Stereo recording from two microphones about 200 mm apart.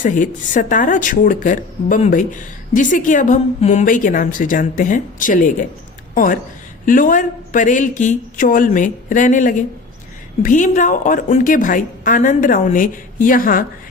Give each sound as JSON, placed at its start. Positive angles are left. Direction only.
{"t": 0.0, "sound": "a woman's voice", "side_deg": 40}